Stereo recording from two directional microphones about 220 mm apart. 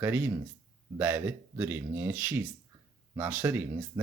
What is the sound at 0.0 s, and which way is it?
Speech, 10° right (ahead or behind).